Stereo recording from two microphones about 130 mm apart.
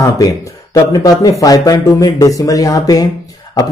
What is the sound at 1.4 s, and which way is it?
A man's voice, 25° left (ahead or behind).